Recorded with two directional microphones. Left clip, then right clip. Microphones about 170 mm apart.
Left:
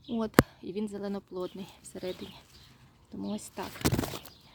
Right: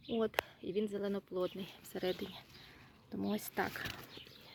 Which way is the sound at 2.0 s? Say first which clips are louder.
Even; 5° left (ahead or behind).